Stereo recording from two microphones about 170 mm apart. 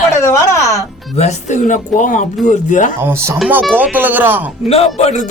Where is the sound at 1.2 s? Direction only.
45° left (ahead or behind).